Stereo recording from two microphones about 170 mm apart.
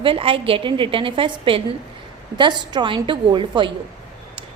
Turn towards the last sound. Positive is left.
turn(degrees=-30)  # may be behind; listen again after turning